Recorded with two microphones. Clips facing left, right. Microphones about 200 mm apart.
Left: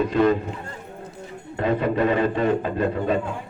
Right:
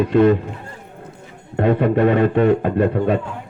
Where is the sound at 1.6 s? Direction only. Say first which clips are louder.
Right 5 dB; 60° right (ahead or behind).